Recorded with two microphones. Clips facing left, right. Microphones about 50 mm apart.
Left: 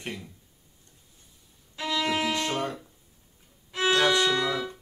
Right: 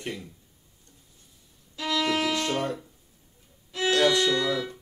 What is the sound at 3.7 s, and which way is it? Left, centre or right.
Violin, left.